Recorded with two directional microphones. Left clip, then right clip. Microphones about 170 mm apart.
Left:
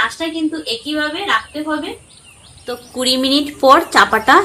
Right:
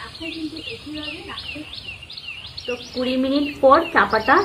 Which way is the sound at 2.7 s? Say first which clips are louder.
Left 6 dB; 90° left.